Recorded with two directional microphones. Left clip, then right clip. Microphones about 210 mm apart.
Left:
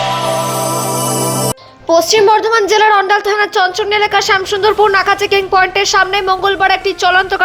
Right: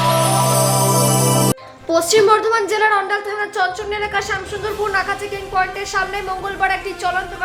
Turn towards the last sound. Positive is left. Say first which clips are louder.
# left 9 dB
turn(degrees=35)  # may be behind; listen again after turning